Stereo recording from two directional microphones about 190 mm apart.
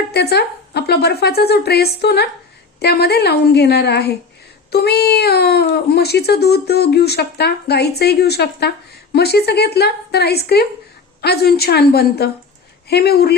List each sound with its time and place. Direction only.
0.1 s a woman's voice: 60° left (ahead or behind)